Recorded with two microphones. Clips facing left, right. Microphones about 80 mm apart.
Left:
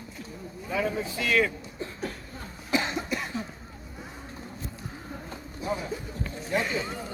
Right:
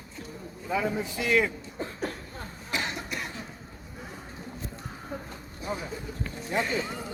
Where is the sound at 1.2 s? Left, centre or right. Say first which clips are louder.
Even; centre.